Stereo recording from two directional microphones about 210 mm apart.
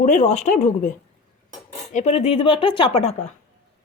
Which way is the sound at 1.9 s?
30° left (ahead or behind).